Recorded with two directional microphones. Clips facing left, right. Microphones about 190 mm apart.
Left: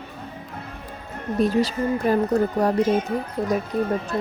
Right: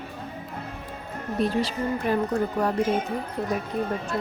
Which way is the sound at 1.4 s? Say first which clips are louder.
Left 4 dB; 40° left (ahead or behind).